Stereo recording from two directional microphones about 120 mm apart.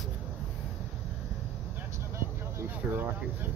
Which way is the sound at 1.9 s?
25° right (ahead or behind).